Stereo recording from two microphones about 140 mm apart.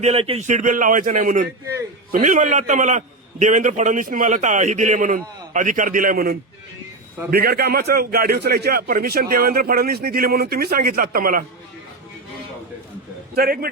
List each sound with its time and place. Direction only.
0.0 s speech: 45° right (ahead or behind)
0.4 s a man's voice: 65° right (ahead or behind); by 11.4 s 90° right
13.3 s a man's voice: 90° right